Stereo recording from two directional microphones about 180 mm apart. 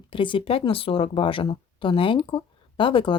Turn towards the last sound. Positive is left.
turn(degrees=30)  # may be behind; listen again after turning